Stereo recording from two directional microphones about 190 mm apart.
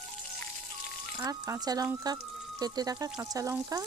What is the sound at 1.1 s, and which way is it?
Speech, 15° right (ahead or behind).